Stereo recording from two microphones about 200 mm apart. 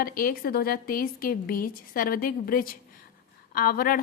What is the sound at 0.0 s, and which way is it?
A woman's voice, 45° left (ahead or behind).